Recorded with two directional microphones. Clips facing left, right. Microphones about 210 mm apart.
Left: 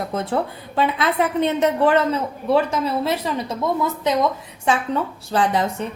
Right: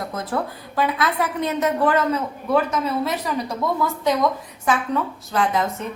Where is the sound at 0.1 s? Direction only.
25° left (ahead or behind).